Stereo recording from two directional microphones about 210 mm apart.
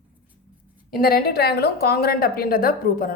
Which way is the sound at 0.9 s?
45° left (ahead or behind).